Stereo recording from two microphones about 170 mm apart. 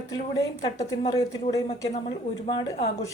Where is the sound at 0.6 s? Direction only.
20° left (ahead or behind).